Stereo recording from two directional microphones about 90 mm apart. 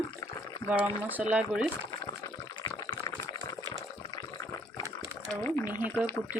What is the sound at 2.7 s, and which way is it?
Liquid, 40° left (ahead or behind).